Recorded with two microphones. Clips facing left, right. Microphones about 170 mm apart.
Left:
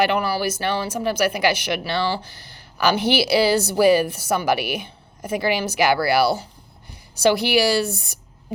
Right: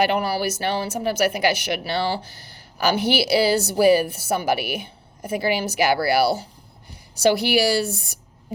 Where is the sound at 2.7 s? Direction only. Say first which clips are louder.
Left 1 dB; 40° right (ahead or behind).